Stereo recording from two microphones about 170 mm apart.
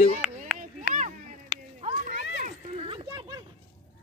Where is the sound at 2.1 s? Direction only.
90° left.